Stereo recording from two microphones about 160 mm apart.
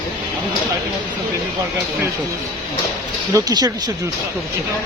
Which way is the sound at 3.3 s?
25° right (ahead or behind).